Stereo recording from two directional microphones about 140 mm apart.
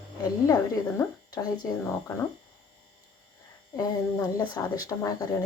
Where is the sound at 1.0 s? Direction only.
30° left (ahead or behind).